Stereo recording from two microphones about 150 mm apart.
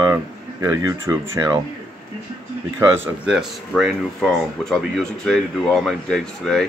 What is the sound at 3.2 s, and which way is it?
Speech, 5° right (ahead or behind).